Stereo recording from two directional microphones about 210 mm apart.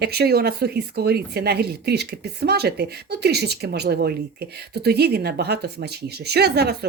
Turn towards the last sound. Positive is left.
turn(degrees=-50)  # may be behind; listen again after turning